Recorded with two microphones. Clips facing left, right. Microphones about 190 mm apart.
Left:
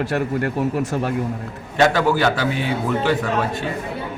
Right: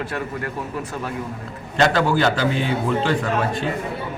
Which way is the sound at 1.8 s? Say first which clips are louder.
Left 1 dB; 10° left (ahead or behind).